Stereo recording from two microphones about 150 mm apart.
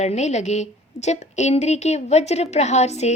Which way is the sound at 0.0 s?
50° left (ahead or behind).